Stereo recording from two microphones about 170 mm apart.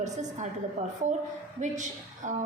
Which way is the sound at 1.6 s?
45° right (ahead or behind).